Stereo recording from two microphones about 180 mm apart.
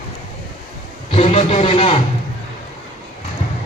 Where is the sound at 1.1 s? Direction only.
35° left (ahead or behind).